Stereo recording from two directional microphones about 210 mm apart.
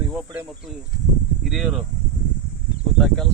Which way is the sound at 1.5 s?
Centre (ahead or behind).